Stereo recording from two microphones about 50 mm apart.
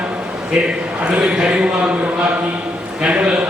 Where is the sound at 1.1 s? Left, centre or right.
Centre.